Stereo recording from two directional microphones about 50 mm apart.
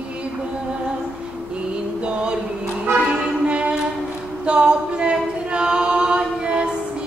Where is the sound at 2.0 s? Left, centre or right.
Right.